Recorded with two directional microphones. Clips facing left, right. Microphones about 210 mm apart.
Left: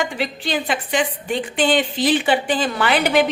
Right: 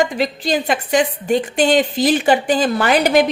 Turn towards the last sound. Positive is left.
turn(degrees=-40)  # may be behind; listen again after turning